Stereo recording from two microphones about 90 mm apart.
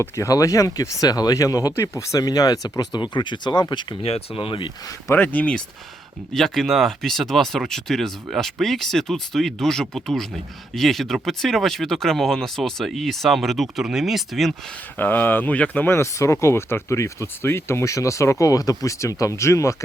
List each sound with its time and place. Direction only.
0.0 s speech: 35° left (ahead or behind); by 4.7 s 70° left (ahead or behind)
5.1 s speech: 20° left (ahead or behind)
6.3 s speech: 5° left (ahead or behind)
14.9 s speech: 20° left (ahead or behind)
16.0 s speech: 30° left (ahead or behind)